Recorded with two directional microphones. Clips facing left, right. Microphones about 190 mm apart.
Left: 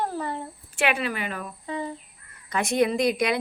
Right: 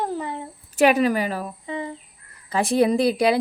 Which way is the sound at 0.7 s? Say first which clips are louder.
Right 8 dB; 40° right (ahead or behind).